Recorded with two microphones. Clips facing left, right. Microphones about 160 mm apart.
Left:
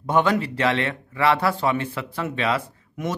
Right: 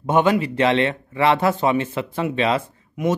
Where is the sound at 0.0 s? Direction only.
20° right (ahead or behind).